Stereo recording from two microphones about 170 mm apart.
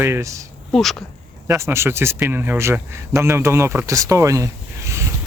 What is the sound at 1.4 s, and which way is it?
Speech, 15° right (ahead or behind).